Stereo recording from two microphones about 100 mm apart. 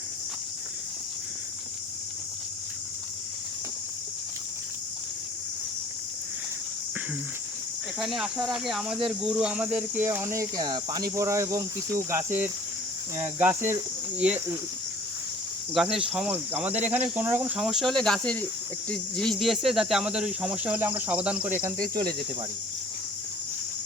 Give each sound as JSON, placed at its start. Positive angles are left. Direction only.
{"t": 7.9, "sound": "speech", "side_deg": -5}
{"t": 10.6, "sound": "cricket", "side_deg": -40}
{"t": 14.2, "sound": "speech", "side_deg": -15}
{"t": 15.7, "sound": "speech", "side_deg": -5}
{"t": 16.1, "sound": "speech", "side_deg": -15}
{"t": 17.6, "sound": "speech", "side_deg": 0}